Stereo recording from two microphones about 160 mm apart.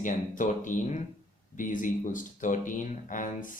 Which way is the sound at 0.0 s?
55° left (ahead or behind).